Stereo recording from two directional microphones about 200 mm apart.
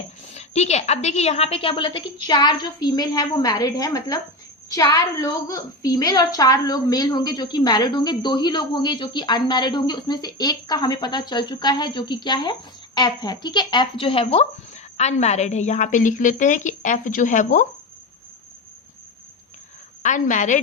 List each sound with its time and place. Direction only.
0.3 s a woman's voice: 35° left (ahead or behind)
20.0 s a woman's voice: 40° left (ahead or behind)